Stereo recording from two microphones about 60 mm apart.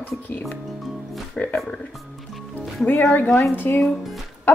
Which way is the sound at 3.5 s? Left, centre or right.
Left.